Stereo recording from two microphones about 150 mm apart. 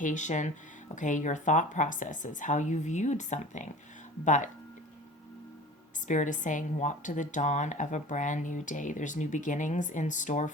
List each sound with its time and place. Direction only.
0.0 s speech: 55° left (ahead or behind)
6.1 s speech: 55° left (ahead or behind)